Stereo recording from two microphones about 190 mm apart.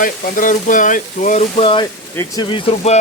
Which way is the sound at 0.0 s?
45° left (ahead or behind).